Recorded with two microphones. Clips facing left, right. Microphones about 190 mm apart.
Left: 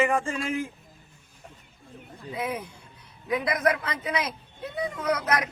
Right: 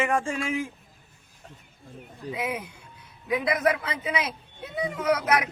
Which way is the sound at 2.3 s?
15° right (ahead or behind).